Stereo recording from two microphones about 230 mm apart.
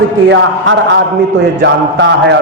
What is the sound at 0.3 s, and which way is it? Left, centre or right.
A man's voice, right.